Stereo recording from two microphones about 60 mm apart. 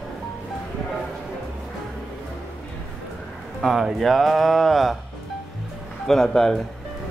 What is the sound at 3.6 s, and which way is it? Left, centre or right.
A man's voice, centre.